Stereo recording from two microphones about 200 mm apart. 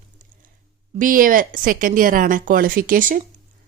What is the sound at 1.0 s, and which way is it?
Speech, 45° right (ahead or behind).